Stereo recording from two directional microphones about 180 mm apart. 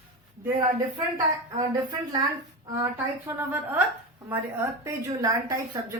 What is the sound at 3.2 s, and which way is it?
A woman's voice, 10° right (ahead or behind).